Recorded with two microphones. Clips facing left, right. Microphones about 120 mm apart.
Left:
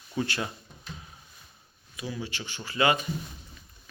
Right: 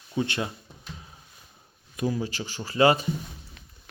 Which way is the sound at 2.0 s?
40° right (ahead or behind).